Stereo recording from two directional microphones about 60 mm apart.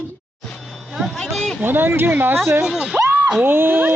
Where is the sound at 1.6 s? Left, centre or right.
Right.